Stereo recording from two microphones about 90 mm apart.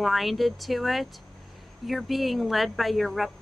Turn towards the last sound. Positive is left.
turn(degrees=0)  # may be behind; listen again after turning